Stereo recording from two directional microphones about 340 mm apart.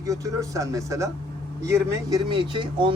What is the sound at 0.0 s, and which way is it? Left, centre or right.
Speech, centre.